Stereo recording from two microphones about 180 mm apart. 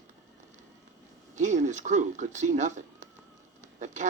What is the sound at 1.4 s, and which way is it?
Speech, 40° right (ahead or behind).